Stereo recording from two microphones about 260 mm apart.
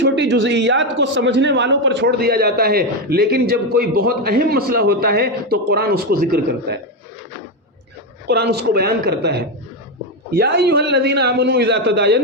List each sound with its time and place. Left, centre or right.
0.0 s a man's voice: right
8.3 s a man's voice: right